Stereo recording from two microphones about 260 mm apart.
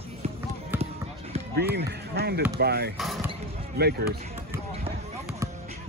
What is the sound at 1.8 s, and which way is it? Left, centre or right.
Speech, right.